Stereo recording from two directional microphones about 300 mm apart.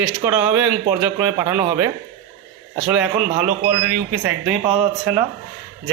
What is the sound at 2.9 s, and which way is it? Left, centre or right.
Speech, centre.